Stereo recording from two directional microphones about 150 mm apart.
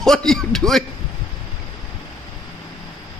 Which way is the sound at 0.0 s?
Centre (ahead or behind).